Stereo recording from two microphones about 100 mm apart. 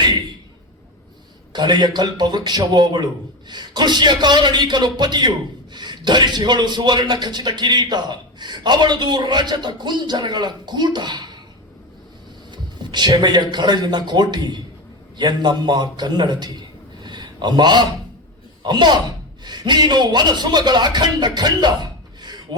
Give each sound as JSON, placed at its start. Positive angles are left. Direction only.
{"t": 1.5, "sound": "speech", "side_deg": -45}
{"t": 12.5, "sound": "a man's voice", "side_deg": -50}